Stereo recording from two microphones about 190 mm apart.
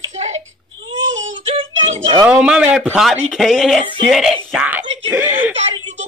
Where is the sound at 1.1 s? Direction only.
85° right.